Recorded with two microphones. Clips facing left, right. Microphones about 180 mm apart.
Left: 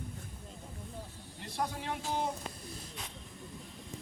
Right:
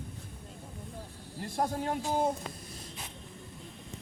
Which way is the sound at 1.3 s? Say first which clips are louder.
Right 5 dB; 50° right (ahead or behind).